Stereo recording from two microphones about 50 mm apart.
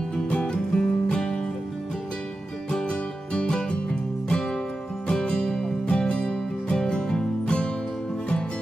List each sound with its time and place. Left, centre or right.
0.1 s music: left
2.7 s music: centre